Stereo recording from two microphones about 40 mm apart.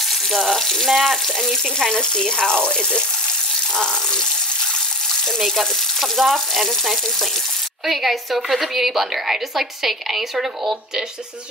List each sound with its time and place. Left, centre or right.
0.7 s water tap: centre
0.9 s speech: centre; by 3.0 s left
5.4 s a woman's voice: centre